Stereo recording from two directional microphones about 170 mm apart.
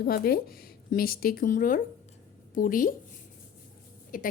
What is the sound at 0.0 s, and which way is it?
A woman's voice, 65° left (ahead or behind).